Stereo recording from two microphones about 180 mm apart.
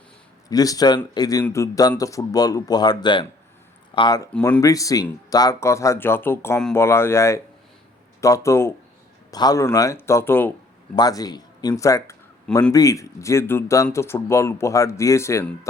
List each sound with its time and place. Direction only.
0.5 s speech: 20° left (ahead or behind)
4.3 s speech: 5° left (ahead or behind)
4.6 s speech: 20° left (ahead or behind)